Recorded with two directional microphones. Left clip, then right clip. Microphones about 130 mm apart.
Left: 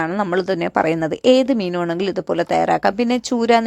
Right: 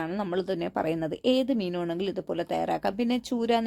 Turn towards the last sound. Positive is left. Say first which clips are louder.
# left 11 dB
turn(degrees=20)  # may be behind; listen again after turning